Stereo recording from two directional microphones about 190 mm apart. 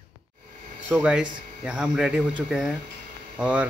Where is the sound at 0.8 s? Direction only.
5° right (ahead or behind).